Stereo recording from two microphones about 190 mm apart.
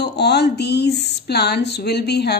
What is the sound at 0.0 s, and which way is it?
A woman's voice, 60° left (ahead or behind).